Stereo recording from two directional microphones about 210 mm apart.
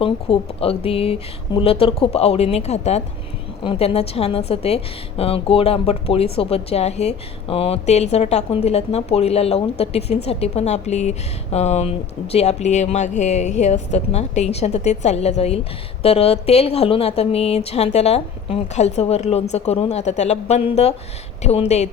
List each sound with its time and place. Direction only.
0.0 s a woman's voice: 25° left (ahead or behind)